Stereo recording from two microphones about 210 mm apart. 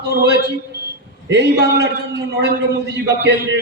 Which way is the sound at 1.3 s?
55° right (ahead or behind).